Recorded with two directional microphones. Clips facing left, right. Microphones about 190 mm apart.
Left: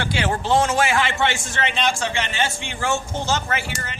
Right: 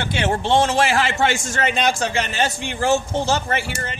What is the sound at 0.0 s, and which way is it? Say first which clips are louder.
A man's voice: right 2 dB; 25° right (ahead or behind).